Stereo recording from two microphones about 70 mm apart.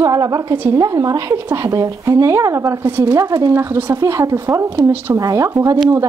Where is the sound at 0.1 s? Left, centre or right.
Right.